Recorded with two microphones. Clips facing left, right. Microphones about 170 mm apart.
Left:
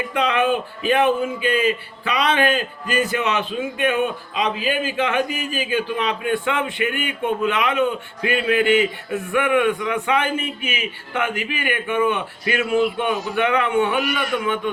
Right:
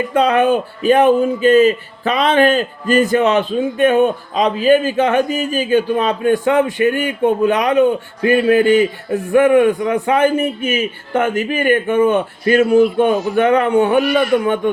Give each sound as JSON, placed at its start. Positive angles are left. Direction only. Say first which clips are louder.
{"t": 0.1, "sound": "a man's voice", "louder": "right 6 dB", "side_deg": -40}